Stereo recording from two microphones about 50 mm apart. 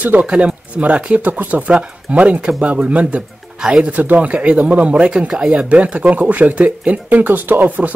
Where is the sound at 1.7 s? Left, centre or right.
Right.